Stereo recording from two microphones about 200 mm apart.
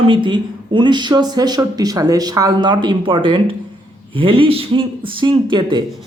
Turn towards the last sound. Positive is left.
turn(degrees=-25)  # may be behind; listen again after turning